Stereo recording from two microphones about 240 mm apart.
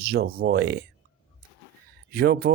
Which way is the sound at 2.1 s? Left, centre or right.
Right.